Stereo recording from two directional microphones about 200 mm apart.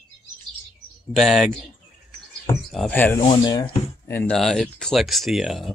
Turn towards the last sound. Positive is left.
turn(degrees=0)  # may be behind; listen again after turning